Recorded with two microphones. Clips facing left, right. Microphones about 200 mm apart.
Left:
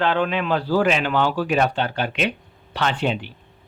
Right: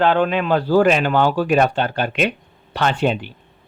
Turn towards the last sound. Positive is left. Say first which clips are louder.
# right 4 dB
turn(degrees=-45)  # may be behind; listen again after turning